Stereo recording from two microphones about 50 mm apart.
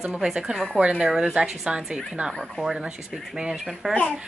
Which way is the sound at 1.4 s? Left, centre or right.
Right.